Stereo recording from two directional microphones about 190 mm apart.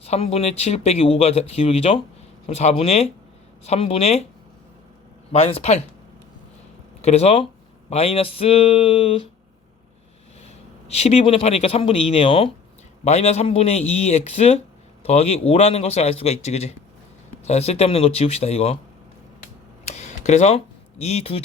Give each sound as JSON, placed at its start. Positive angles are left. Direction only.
{"t": 0.0, "sound": "speech", "side_deg": 30}
{"t": 5.3, "sound": "speech", "side_deg": 30}
{"t": 7.0, "sound": "speech", "side_deg": 35}
{"t": 10.8, "sound": "speech", "side_deg": 35}
{"t": 19.8, "sound": "a sound", "side_deg": 35}
{"t": 21.0, "sound": "speech", "side_deg": 35}